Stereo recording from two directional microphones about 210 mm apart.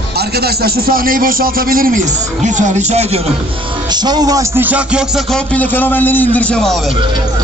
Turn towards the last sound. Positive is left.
turn(degrees=5)  # may be behind; listen again after turning